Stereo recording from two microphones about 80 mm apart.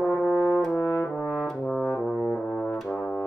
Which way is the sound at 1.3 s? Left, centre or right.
Centre.